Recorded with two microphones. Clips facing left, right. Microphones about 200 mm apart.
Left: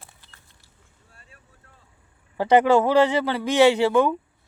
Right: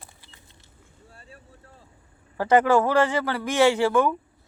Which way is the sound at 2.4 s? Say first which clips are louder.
Left 2 dB; 15° left (ahead or behind).